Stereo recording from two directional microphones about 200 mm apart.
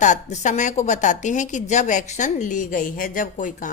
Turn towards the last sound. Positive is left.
turn(degrees=40)  # may be behind; listen again after turning